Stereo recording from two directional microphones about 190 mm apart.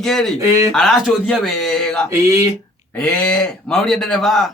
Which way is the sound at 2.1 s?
15° right (ahead or behind).